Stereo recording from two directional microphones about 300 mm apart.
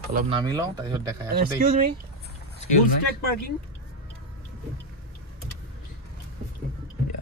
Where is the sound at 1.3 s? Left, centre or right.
Right.